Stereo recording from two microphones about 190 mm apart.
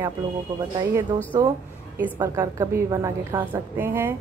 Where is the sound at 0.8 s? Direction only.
15° right (ahead or behind).